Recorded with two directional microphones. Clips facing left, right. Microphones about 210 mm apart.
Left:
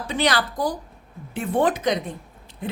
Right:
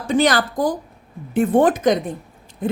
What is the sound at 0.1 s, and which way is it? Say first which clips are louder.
A woman's voice: right 6 dB; 45° right (ahead or behind).